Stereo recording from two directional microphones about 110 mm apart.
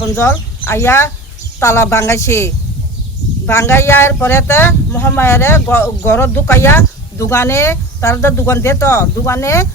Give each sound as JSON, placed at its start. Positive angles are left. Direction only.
{"t": 0.0, "sound": "speech", "side_deg": 20}